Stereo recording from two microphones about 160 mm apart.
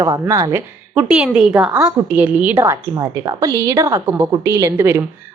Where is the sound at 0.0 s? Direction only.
20° right (ahead or behind).